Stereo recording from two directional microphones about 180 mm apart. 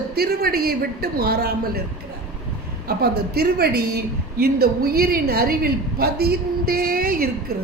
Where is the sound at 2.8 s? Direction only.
60° right (ahead or behind).